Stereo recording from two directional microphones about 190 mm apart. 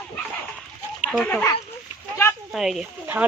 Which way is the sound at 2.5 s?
Centre (ahead or behind).